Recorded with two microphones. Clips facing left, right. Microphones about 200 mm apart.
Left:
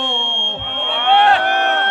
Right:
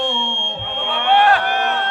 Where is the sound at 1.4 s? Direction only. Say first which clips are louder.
Left 2 dB; 65° left (ahead or behind).